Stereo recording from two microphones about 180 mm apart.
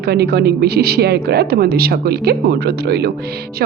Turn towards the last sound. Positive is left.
turn(degrees=-65)  # may be behind; listen again after turning